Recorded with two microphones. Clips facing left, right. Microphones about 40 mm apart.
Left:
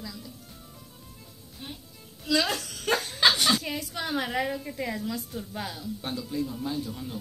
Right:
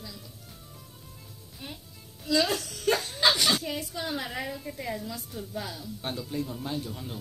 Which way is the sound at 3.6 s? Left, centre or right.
Left.